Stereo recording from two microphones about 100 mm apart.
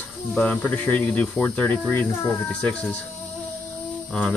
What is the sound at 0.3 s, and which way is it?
Speech, 15° left (ahead or behind).